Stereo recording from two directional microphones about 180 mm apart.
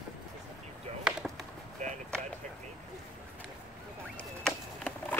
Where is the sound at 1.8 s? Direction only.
40° right (ahead or behind).